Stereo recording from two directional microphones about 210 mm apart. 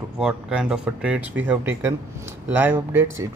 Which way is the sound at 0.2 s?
5° right (ahead or behind).